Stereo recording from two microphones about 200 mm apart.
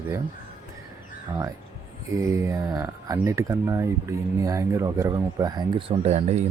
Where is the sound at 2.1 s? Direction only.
15° right (ahead or behind).